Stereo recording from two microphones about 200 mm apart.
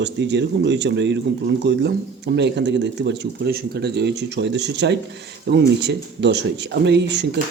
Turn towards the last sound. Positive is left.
turn(degrees=-60)  # may be behind; listen again after turning